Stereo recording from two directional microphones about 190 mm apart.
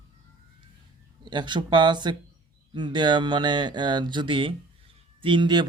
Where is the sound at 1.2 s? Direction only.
25° right (ahead or behind).